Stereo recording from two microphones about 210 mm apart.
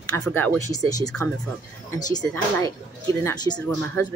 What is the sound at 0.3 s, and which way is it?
Speech, 10° left (ahead or behind).